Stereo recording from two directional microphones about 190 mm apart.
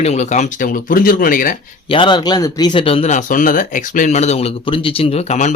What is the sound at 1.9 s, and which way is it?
Speech, 25° left (ahead or behind).